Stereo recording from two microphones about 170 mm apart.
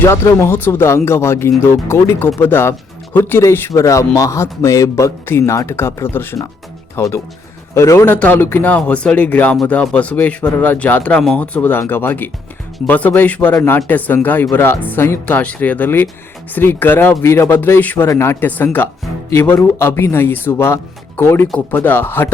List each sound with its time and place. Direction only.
0.0 s speech: 15° left (ahead or behind)